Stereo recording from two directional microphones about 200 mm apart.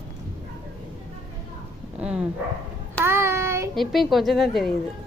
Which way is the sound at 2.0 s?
5° right (ahead or behind).